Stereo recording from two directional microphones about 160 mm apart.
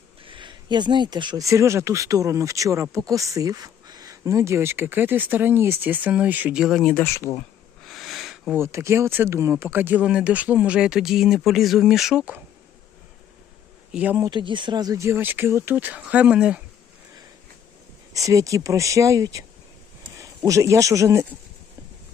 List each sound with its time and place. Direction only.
0.2 s speech: 30° right (ahead or behind); by 7.0 s 5° left (ahead or behind)
7.0 s speech: 15° left (ahead or behind)
7.9 s a sound: centre (ahead or behind)
8.5 s speech: 15° right (ahead or behind)
13.9 s speech: 10° right (ahead or behind)
14.3 s speech: 30° right (ahead or behind); by 16.6 s 5° right (ahead or behind)
18.1 s speech: 20° right (ahead or behind)